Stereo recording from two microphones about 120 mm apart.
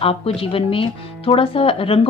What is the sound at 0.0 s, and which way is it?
A woman's voice, 50° left (ahead or behind).